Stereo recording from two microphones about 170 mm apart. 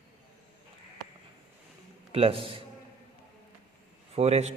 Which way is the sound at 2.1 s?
35° right (ahead or behind).